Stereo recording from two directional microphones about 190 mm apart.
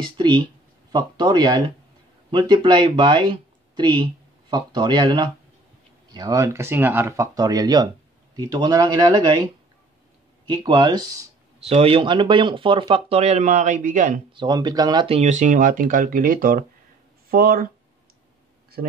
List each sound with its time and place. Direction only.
0.0 s speech: 25° right (ahead or behind)
11.6 s speech: 30° right (ahead or behind)
14.3 s speech: 25° right (ahead or behind)
15.1 s speech: 40° right (ahead or behind)
18.8 s speech: 50° right (ahead or behind)